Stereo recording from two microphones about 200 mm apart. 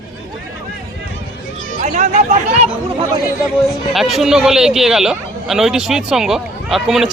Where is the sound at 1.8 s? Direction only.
40° right (ahead or behind).